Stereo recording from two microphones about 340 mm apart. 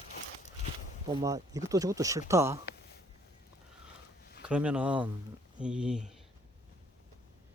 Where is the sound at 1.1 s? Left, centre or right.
Centre.